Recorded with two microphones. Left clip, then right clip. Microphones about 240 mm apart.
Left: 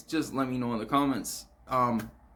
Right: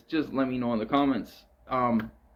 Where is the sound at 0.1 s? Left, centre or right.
Centre.